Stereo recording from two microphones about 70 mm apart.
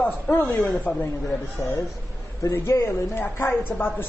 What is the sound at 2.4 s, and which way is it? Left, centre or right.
A man's voice, left.